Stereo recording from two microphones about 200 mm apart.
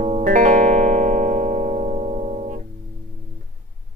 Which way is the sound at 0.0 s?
40° right (ahead or behind).